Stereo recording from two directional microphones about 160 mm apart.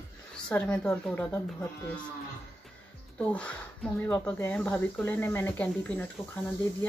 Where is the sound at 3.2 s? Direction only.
5° left (ahead or behind).